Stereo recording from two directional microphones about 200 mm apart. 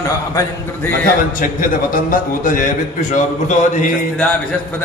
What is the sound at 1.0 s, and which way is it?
Speech, 45° left (ahead or behind).